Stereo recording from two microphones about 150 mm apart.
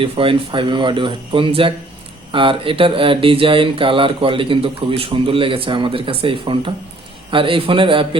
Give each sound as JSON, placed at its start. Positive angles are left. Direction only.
{"t": 0.0, "sound": "speech", "side_deg": -35}